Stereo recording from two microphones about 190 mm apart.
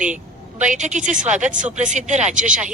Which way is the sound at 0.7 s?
40° right (ahead or behind).